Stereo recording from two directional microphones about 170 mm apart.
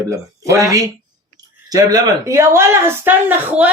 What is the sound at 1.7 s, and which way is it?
Speech, 20° right (ahead or behind).